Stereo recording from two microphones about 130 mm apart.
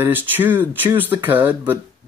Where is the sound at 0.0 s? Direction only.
15° right (ahead or behind).